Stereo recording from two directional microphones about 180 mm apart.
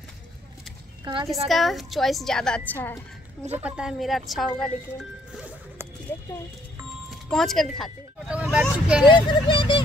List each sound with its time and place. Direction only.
1.0 s speech: 25° right (ahead or behind)
1.5 s a woman's voice: centre (ahead or behind)
3.5 s a woman's voice: 5° right (ahead or behind)
7.1 s speech: centre (ahead or behind)
9.0 s speech: 25° left (ahead or behind)